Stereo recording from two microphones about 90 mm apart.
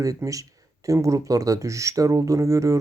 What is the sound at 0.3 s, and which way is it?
Speech, 40° right (ahead or behind).